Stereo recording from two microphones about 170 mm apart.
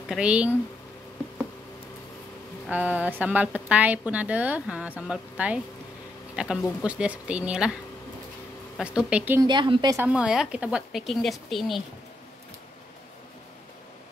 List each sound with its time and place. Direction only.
0.1 s a woman's voice: 5° right (ahead or behind)
2.7 s a woman's voice: 10° right (ahead or behind)
8.7 s a woman's voice: 5° right (ahead or behind)
9.4 s speech: 30° right (ahead or behind)
9.9 s speech: 5° right (ahead or behind)